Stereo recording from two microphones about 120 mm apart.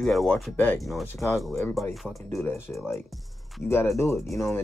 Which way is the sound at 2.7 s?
20° left (ahead or behind).